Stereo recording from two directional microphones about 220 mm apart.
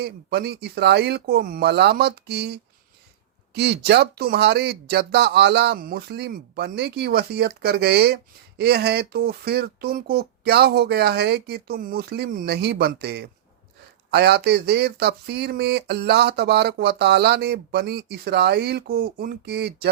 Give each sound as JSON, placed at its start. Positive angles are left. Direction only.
{"t": 0.0, "sound": "speech", "side_deg": -45}